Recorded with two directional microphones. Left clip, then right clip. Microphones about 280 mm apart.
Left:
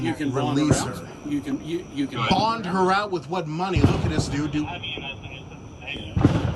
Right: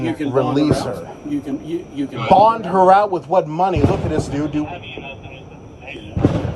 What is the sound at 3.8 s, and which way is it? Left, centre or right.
Speech, centre.